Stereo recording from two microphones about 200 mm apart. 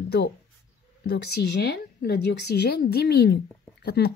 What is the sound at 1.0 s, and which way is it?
A woman's voice, 55° left (ahead or behind).